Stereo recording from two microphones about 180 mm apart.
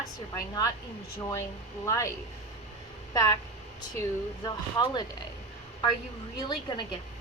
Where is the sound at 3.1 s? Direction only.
20° left (ahead or behind).